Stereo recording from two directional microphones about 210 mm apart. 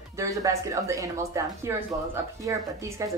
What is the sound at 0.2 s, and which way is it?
A woman's voice, 15° right (ahead or behind).